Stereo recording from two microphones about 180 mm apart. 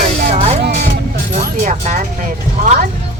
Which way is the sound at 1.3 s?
40° right (ahead or behind).